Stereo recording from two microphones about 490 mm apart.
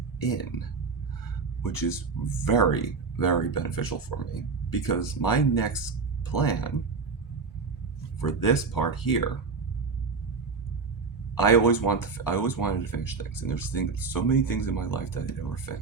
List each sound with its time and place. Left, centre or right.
1.6 s speech: left
8.2 s speech: left
11.3 s speech: left